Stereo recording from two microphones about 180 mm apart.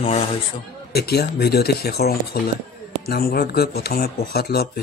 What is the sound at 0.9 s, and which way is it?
Speech, 60° left (ahead or behind).